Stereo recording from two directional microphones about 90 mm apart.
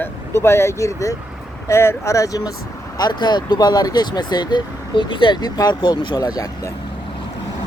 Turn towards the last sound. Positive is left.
turn(degrees=40)  # may be behind; listen again after turning